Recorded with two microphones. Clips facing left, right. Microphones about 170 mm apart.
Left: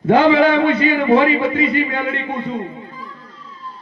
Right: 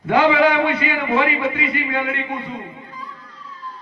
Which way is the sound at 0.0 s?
30° left (ahead or behind).